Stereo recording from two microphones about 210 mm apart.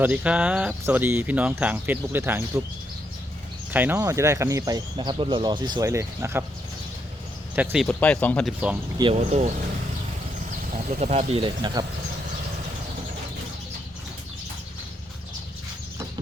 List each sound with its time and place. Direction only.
0.0 s speech: 5° right (ahead or behind)
3.7 s speech: 10° right (ahead or behind)
7.5 s speech: 5° right (ahead or behind)
7.9 s speech: 5° left (ahead or behind)
9.0 s speech: 30° right (ahead or behind)
10.7 s speech: 35° right (ahead or behind)